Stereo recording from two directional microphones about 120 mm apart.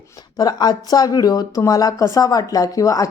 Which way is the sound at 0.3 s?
35° left (ahead or behind).